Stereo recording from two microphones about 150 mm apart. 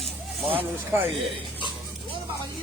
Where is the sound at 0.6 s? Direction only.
15° right (ahead or behind).